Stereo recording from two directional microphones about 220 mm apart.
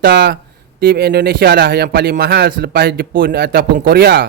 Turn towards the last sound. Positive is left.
turn(degrees=-45)  # may be behind; listen again after turning